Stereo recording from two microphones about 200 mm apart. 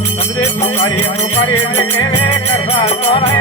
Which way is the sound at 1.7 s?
10° left (ahead or behind).